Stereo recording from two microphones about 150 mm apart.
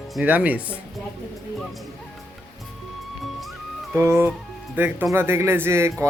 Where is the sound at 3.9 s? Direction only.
15° right (ahead or behind).